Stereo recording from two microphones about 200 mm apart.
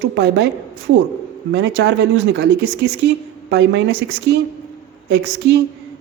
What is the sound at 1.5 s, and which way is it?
Speech, 60° right (ahead or behind).